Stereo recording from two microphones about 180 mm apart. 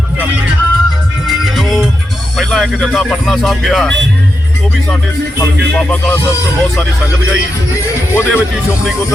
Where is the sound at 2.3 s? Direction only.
5° left (ahead or behind).